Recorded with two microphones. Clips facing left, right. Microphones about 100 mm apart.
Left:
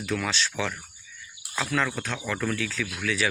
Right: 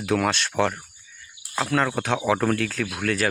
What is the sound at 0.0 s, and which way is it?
Speech, 60° right (ahead or behind).